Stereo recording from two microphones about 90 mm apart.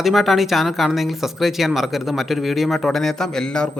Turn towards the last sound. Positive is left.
turn(degrees=5)  # may be behind; listen again after turning